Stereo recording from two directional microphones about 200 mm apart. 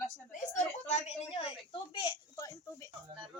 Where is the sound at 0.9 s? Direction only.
30° left (ahead or behind).